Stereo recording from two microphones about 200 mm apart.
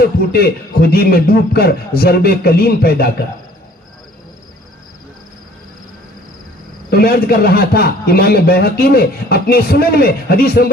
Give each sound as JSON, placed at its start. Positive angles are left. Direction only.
{"t": 0.0, "sound": "a man's voice", "side_deg": 50}
{"t": 6.9, "sound": "a man's voice", "side_deg": 50}